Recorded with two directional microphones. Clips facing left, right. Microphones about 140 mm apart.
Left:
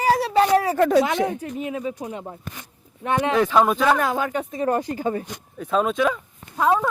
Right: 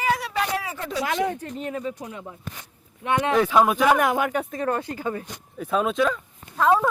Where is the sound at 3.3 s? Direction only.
5° right (ahead or behind).